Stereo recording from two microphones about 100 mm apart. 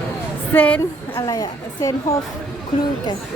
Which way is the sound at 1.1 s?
35° left (ahead or behind).